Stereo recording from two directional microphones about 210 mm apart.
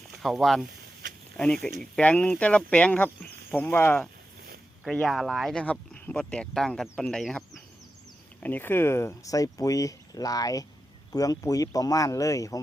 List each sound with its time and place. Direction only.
0.2 s speech: centre (ahead or behind)
1.8 s speech: 5° left (ahead or behind)